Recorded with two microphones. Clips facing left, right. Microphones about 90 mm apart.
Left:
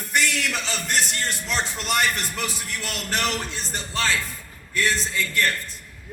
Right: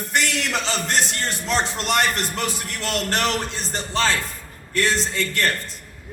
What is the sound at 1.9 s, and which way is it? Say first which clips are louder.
A man's voice: right 2 dB; 50° right (ahead or behind).